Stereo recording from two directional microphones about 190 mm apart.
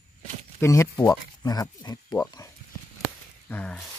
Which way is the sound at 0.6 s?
15° left (ahead or behind).